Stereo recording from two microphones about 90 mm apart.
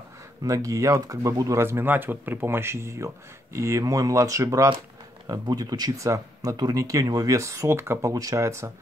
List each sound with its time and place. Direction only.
0.4 s speech: 40° right (ahead or behind)
1.6 s speech: 25° right (ahead or behind)
8.1 s speech: 40° right (ahead or behind)